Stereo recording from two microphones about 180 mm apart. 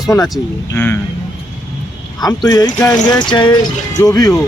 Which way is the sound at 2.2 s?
20° left (ahead or behind).